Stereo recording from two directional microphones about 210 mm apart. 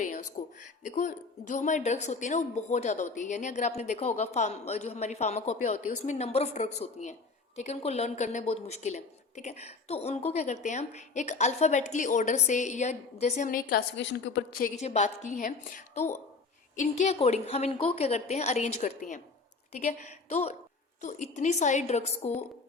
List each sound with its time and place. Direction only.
0.0 s speech: 35° left (ahead or behind); by 14.4 s 55° left (ahead or behind)
14.6 s speech: 35° left (ahead or behind)